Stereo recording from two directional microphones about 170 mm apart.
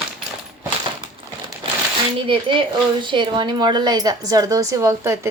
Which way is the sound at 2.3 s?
30° right (ahead or behind).